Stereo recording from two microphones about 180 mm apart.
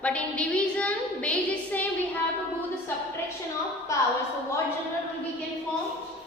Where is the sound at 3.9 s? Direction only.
15° left (ahead or behind).